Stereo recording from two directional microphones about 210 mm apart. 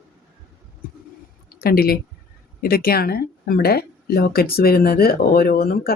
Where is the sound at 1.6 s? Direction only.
45° left (ahead or behind).